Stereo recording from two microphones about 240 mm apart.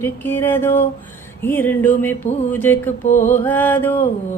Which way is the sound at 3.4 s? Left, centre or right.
Centre.